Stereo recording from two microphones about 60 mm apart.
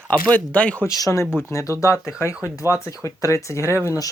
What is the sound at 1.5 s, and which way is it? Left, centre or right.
Speech, left.